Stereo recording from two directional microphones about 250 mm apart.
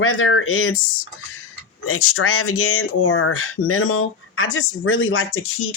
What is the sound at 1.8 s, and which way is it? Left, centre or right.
Speech, left.